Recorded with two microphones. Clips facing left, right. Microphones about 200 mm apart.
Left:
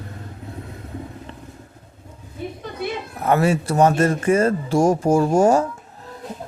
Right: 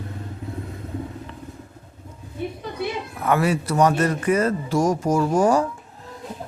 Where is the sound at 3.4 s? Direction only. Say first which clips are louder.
Left 2 dB; 25° left (ahead or behind).